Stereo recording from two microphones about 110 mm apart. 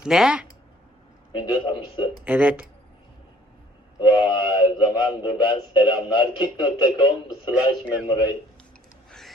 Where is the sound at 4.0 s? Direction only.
40° left (ahead or behind).